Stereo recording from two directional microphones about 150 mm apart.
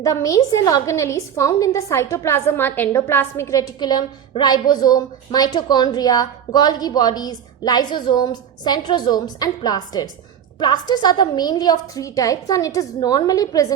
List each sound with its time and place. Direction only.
0.0 s a woman's voice: 20° left (ahead or behind)